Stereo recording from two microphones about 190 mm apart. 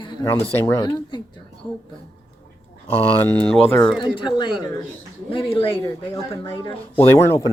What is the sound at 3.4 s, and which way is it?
Speech, 5° left (ahead or behind).